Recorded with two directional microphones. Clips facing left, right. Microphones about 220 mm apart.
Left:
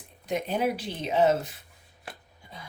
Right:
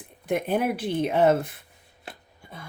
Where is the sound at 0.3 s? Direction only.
55° right (ahead or behind).